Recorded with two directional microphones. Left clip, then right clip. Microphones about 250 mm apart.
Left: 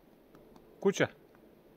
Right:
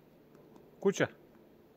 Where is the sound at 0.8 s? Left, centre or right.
Centre.